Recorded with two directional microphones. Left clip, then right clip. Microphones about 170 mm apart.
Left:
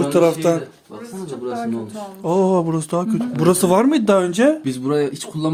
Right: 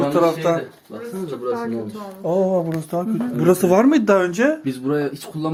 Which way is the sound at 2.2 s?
50° left (ahead or behind).